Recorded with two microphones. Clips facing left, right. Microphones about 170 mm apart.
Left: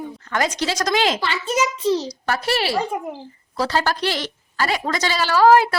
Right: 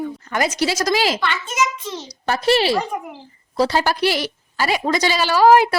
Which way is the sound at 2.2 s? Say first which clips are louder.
Right 5 dB; 20° right (ahead or behind).